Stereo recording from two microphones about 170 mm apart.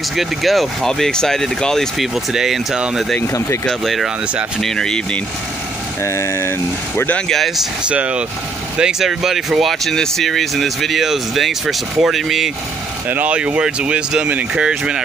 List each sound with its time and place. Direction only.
0.1 s speech: centre (ahead or behind)
3.2 s speech: 20° left (ahead or behind)
3.6 s speech: centre (ahead or behind)
6.0 s speech: 15° left (ahead or behind); by 15.0 s 5° right (ahead or behind)